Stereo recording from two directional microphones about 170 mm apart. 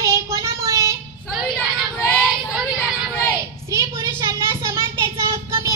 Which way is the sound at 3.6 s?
20° right (ahead or behind).